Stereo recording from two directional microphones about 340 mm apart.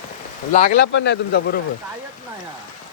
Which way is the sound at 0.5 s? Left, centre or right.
Left.